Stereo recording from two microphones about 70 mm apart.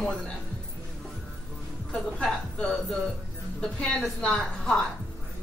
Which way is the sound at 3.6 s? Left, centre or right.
Centre.